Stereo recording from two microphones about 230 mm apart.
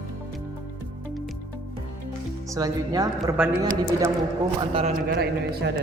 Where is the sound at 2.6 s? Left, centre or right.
Centre.